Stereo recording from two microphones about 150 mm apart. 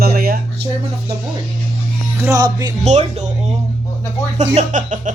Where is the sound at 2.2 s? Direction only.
25° right (ahead or behind).